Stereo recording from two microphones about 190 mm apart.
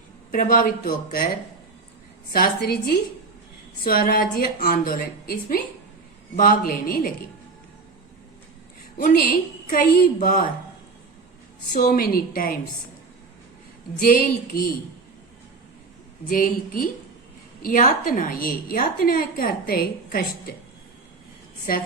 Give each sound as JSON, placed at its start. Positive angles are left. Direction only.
{"t": 0.3, "sound": "a woman's voice", "side_deg": 45}
{"t": 2.3, "sound": "a woman's voice", "side_deg": 50}
{"t": 9.0, "sound": "a woman's voice", "side_deg": 45}
{"t": 11.7, "sound": "a woman's voice", "side_deg": 45}
{"t": 14.1, "sound": "a woman's voice", "side_deg": 50}
{"t": 16.3, "sound": "a woman's voice", "side_deg": 45}